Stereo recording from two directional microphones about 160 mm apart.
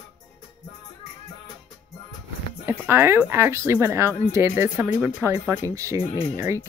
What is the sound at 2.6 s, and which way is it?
Speech, 15° right (ahead or behind).